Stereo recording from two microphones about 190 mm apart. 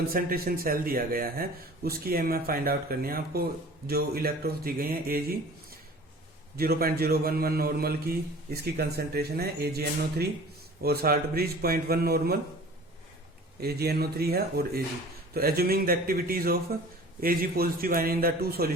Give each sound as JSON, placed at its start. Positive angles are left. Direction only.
{"t": 0.1, "sound": "speech", "side_deg": -50}
{"t": 6.6, "sound": "a man's voice", "side_deg": -50}
{"t": 13.6, "sound": "a man's voice", "side_deg": -55}